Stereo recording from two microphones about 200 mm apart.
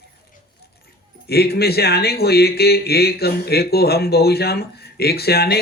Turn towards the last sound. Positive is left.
turn(degrees=50)  # may be behind; listen again after turning